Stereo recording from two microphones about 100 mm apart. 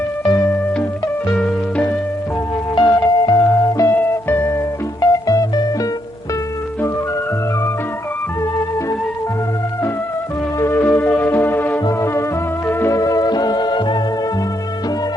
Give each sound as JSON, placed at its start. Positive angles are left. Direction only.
{"t": 2.7, "sound": "music", "side_deg": 50}
{"t": 3.9, "sound": "music", "side_deg": 20}
{"t": 4.9, "sound": "music", "side_deg": 35}
{"t": 10.6, "sound": "music", "side_deg": 25}
{"t": 13.0, "sound": "music", "side_deg": 35}